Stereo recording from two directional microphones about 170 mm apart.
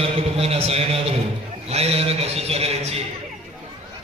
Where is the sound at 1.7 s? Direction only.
35° right (ahead or behind).